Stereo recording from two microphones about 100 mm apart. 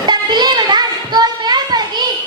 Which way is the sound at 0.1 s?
45° right (ahead or behind).